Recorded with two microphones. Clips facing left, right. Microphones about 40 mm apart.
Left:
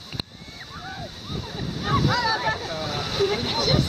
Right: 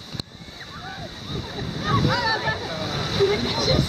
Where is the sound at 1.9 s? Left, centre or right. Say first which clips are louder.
Even; centre.